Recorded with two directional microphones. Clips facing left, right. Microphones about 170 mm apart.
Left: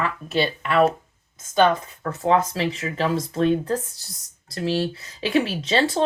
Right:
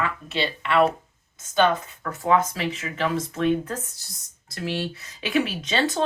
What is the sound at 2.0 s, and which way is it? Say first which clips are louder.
Speech: left 1 dB; 30° left (ahead or behind).